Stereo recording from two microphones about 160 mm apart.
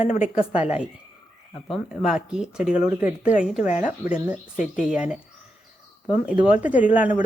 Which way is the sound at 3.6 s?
50° left (ahead or behind).